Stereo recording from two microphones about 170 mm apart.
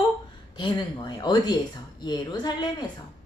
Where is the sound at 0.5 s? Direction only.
25° left (ahead or behind).